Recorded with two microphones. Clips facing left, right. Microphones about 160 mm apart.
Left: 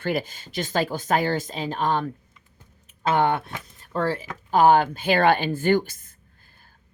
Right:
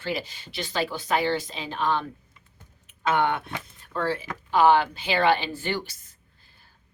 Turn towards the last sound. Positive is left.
turn(degrees=50)  # may be behind; listen again after turning